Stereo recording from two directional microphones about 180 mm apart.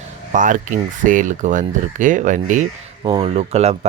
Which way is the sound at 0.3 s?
45° right (ahead or behind).